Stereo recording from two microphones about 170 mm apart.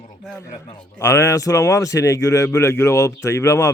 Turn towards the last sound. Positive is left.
turn(degrees=15)  # may be behind; listen again after turning